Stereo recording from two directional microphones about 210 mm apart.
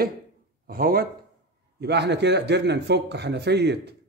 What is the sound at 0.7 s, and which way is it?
Speech, 45° right (ahead or behind).